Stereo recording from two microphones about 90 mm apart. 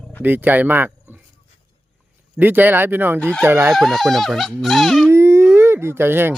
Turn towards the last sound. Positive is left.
turn(degrees=-25)  # may be behind; listen again after turning